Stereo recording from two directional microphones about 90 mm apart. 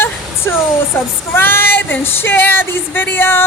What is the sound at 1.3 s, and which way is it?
Child singing, 25° left (ahead or behind).